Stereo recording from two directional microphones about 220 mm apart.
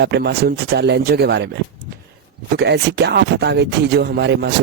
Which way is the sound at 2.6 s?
50° right (ahead or behind).